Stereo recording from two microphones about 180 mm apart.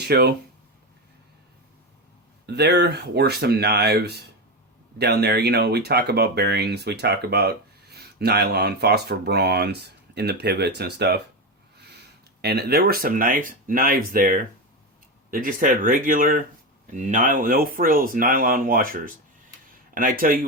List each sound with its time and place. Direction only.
0.1 s speech: 65° right (ahead or behind)
2.5 s speech: 70° right (ahead or behind)
12.4 s speech: 65° right (ahead or behind)